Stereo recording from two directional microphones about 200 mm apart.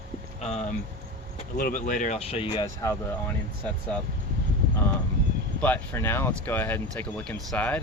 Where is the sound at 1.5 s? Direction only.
40° left (ahead or behind); by 2.9 s 25° left (ahead or behind).